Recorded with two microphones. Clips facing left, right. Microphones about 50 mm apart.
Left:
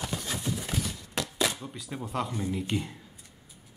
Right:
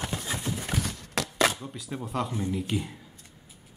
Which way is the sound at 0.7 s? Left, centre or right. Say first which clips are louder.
Right 2 dB; right.